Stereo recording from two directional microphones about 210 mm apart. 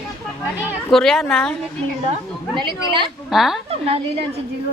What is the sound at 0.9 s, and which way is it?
Speech, centre (ahead or behind).